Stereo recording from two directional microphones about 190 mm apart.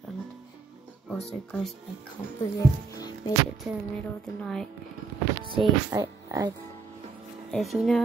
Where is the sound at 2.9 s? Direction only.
20° left (ahead or behind).